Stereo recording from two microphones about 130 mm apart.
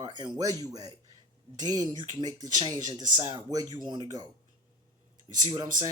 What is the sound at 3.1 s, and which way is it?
Speech, 55° right (ahead or behind).